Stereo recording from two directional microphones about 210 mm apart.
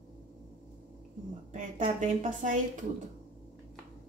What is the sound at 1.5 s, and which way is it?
A woman's voice, 35° right (ahead or behind).